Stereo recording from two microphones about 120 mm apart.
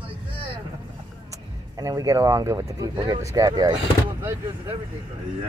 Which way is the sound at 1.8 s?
30° right (ahead or behind).